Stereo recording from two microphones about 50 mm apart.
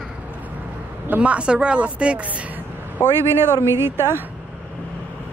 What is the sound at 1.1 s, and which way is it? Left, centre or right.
Speech, right.